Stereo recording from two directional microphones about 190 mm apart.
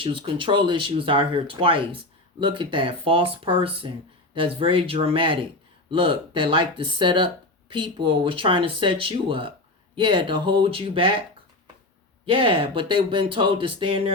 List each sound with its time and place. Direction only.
0.0 s speech: 25° right (ahead or behind)
12.2 s speech: 25° right (ahead or behind)